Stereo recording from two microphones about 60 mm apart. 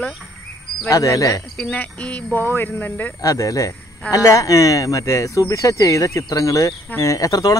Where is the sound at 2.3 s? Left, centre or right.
Left.